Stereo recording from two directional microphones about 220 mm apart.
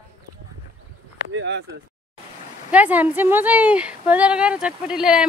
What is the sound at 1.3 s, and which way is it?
Speech, 55° right (ahead or behind).